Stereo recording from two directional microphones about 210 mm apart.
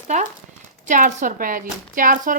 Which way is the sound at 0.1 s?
35° right (ahead or behind).